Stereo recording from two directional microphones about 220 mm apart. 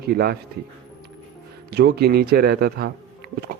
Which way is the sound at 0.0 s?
45° right (ahead or behind).